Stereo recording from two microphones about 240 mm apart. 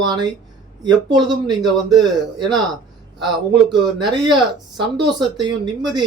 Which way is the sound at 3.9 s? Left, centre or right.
Centre.